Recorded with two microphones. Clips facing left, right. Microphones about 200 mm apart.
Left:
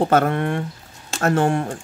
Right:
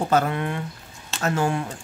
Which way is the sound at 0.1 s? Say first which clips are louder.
Left 4 dB; 50° left (ahead or behind).